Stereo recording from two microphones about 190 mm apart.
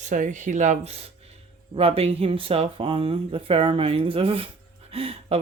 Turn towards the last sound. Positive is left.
turn(degrees=-30)  # may be behind; listen again after turning